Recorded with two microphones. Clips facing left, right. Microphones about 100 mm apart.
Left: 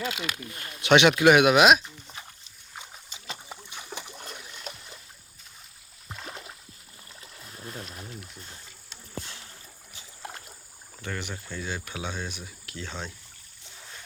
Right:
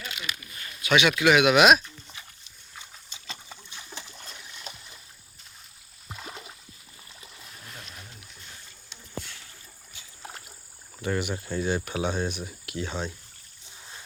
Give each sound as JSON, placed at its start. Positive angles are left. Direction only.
{"t": 0.0, "sound": "speech", "side_deg": 80}
{"t": 0.8, "sound": "speech", "side_deg": 60}
{"t": 1.2, "sound": "speech", "side_deg": 40}
{"t": 1.5, "sound": "speech", "side_deg": 20}
{"t": 3.9, "sound": "boat", "side_deg": 15}
{"t": 6.1, "sound": "a sound", "side_deg": -5}
{"t": 7.2, "sound": "stream", "side_deg": -5}
{"t": 11.0, "sound": "speech", "side_deg": -15}
{"t": 11.7, "sound": "speech", "side_deg": -45}
{"t": 12.7, "sound": "cricket", "side_deg": -10}